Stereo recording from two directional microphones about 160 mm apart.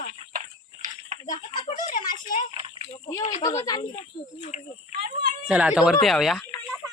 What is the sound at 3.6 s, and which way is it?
Speech, 25° left (ahead or behind).